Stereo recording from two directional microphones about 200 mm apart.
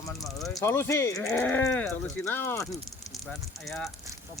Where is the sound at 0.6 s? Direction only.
10° left (ahead or behind).